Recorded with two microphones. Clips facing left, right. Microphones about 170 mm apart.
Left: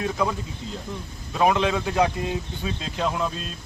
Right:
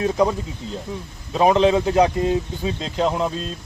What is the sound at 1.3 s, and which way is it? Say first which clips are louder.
A man's voice: right 5 dB; 25° right (ahead or behind).